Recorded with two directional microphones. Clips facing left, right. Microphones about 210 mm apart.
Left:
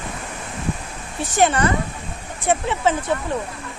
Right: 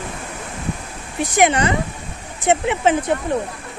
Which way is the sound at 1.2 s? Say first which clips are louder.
Right 2 dB; 15° right (ahead or behind).